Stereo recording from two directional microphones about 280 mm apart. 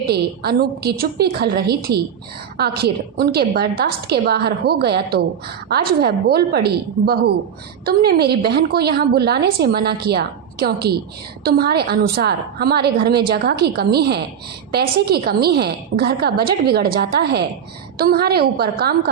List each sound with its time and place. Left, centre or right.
0.1 s a woman's voice: right